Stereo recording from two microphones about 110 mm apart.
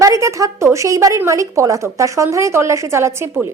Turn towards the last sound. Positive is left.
turn(degrees=-25)  # may be behind; listen again after turning